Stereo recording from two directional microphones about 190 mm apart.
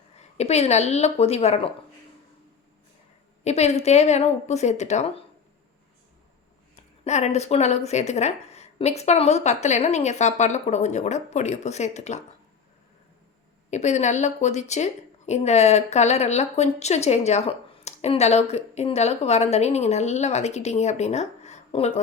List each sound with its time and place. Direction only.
0.2 s a woman's voice: 35° left (ahead or behind)
3.4 s a woman's voice: 35° left (ahead or behind)
7.0 s a woman's voice: 35° left (ahead or behind)
13.7 s a woman's voice: 40° left (ahead or behind)